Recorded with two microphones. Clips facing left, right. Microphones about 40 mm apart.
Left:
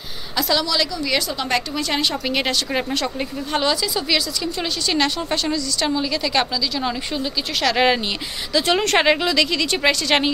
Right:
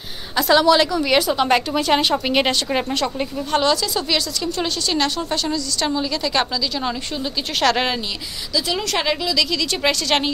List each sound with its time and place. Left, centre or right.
0.4 s speech: centre
2.7 s speech: centre
5.8 s speech: centre
8.5 s speech: left; by 9.8 s centre
9.8 s a woman's voice: centre